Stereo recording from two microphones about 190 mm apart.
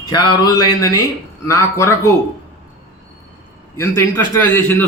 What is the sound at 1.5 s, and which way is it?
Speech, 15° left (ahead or behind).